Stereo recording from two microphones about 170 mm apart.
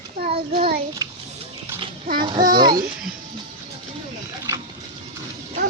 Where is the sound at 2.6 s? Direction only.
20° right (ahead or behind).